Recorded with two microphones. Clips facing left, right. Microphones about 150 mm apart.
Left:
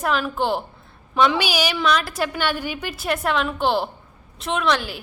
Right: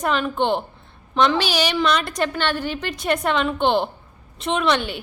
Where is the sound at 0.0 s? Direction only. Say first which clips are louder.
Right 1 dB; 5° left (ahead or behind).